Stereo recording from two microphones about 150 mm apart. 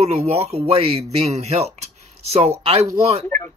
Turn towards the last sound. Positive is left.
turn(degrees=15)  # may be behind; listen again after turning